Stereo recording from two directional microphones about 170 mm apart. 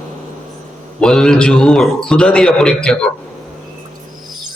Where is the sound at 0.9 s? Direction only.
5° left (ahead or behind).